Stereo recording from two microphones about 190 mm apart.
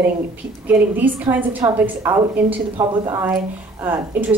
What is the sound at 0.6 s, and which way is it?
A woman's voice, 10° right (ahead or behind).